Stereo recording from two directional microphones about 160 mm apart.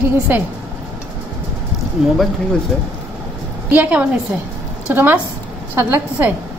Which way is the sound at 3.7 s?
10° right (ahead or behind).